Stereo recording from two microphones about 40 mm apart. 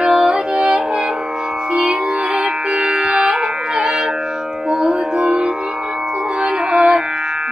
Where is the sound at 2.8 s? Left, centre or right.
Right.